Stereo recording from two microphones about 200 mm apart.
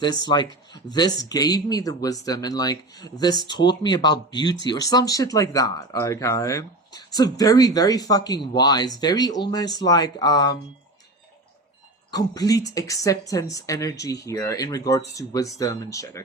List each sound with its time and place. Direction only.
0.0 s speech: 20° left (ahead or behind)
12.1 s speech: 20° left (ahead or behind)